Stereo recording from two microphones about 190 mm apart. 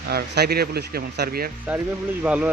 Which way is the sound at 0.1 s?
55° right (ahead or behind).